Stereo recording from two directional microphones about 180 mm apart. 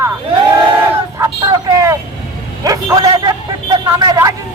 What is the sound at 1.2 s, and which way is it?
Vehicle, 20° right (ahead or behind).